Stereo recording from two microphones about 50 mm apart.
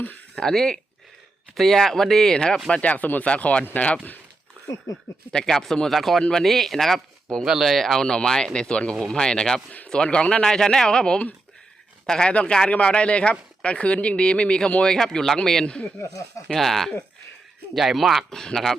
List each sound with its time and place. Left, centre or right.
0.3 s speech: centre
2.6 s speech: centre
2.9 s speech: left
4.9 s speech: left
5.3 s speech: centre
8.0 s speech: centre
15.6 s speech: left
16.5 s speech: centre
18.3 s speech: centre